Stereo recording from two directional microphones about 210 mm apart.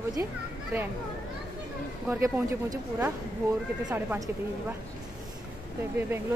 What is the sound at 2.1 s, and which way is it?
Speech, 10° right (ahead or behind).